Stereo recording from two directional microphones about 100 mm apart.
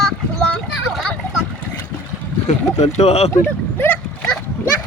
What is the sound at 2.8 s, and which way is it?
Speech, 90° left.